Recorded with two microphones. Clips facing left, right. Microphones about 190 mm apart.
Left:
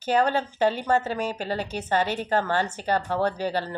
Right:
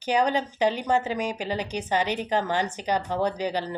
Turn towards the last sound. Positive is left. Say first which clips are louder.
# even
turn(degrees=-15)  # may be behind; listen again after turning